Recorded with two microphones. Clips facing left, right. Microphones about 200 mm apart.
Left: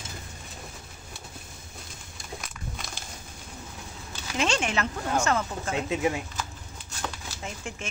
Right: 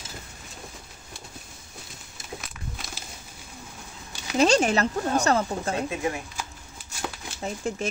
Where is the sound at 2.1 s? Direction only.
5° right (ahead or behind).